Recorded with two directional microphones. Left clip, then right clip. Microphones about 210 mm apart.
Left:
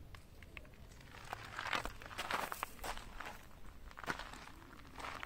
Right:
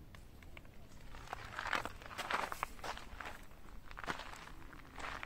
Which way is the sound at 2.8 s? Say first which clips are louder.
Right 1 dB; 15° left (ahead or behind).